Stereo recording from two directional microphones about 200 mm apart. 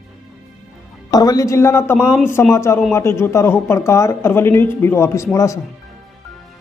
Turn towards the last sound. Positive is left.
turn(degrees=15)  # may be behind; listen again after turning